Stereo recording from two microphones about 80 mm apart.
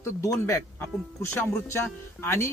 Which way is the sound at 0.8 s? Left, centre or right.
Left.